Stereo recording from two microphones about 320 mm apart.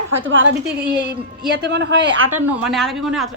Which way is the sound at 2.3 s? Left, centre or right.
Centre.